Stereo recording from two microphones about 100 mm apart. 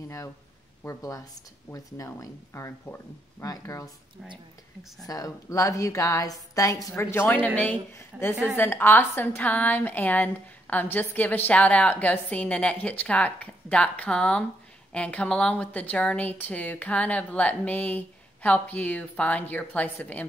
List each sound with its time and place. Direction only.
0.8 s a woman's voice: 35° left (ahead or behind)
5.0 s a woman's voice: 35° left (ahead or behind)
7.0 s a woman's voice: 25° left (ahead or behind)
8.1 s a woman's voice: 15° right (ahead or behind)
8.5 s a woman's voice: 20° left (ahead or behind)